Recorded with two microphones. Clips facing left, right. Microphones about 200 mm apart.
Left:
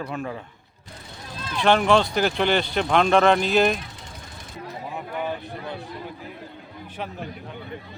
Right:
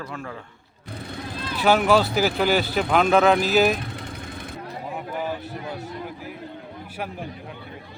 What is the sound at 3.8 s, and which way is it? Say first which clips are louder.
Vehicle: right 7 dB; 60° right (ahead or behind).